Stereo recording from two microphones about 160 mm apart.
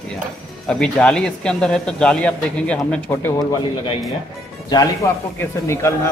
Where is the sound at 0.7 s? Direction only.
5° left (ahead or behind).